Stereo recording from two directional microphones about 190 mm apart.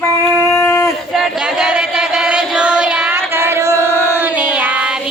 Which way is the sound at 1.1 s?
Centre (ahead or behind).